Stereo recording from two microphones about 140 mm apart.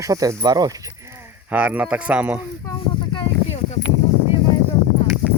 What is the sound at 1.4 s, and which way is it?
Speech, 10° right (ahead or behind).